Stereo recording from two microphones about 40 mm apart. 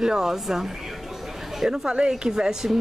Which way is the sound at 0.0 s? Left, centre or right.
Centre.